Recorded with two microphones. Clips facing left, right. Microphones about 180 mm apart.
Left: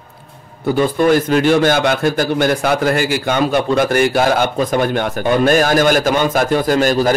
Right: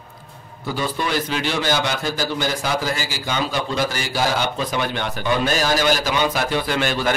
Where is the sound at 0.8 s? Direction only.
50° left (ahead or behind).